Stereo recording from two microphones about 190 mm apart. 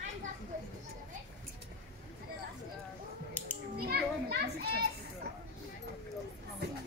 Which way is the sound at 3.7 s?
55° right (ahead or behind).